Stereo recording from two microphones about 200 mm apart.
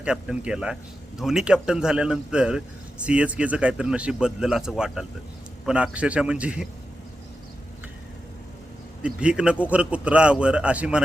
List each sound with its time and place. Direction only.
0.0 s a man's voice: 5° right (ahead or behind)
9.0 s a man's voice: 5° right (ahead or behind)